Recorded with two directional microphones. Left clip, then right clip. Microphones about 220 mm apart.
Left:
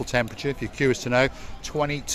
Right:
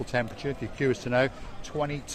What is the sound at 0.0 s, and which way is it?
Speech, 30° left (ahead or behind).